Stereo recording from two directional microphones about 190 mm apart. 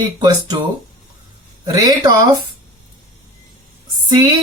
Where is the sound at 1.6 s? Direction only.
20° right (ahead or behind).